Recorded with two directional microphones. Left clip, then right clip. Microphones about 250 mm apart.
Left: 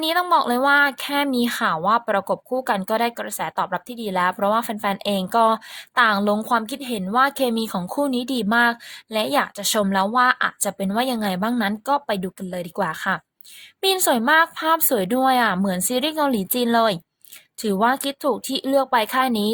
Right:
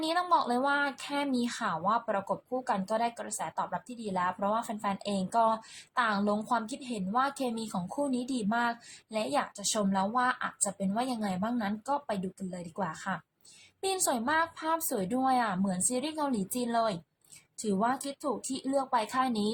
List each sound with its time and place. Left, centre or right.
0.0 s a woman's voice: left
18.3 s speech: left
18.9 s a woman's voice: left